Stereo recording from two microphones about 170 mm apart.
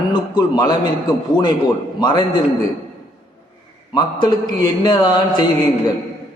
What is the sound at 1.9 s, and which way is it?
Speech, 25° left (ahead or behind).